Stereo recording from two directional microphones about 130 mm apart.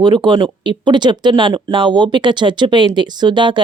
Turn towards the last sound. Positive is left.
turn(degrees=-35)  # may be behind; listen again after turning